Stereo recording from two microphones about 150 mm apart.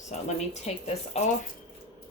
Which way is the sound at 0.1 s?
50° left (ahead or behind).